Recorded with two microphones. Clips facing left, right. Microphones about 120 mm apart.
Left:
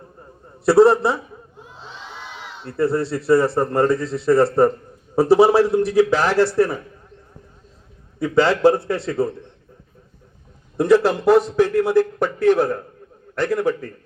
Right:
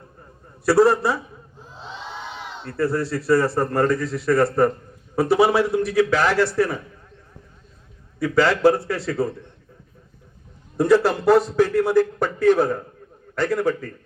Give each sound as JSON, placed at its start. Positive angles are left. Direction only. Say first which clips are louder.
{"t": 0.6, "sound": "speech", "louder": "left 3 dB", "side_deg": 25}
{"t": 2.6, "sound": "a man's voice", "louder": "left 3 dB", "side_deg": 25}
{"t": 8.2, "sound": "speech", "louder": "left 2 dB", "side_deg": 25}
{"t": 9.0, "sound": "a man's voice", "louder": "left 1 dB", "side_deg": 10}
{"t": 10.8, "sound": "a man's voice", "louder": "left 2 dB", "side_deg": 15}